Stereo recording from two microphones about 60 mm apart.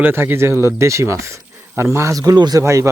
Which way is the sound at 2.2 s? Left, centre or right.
Right.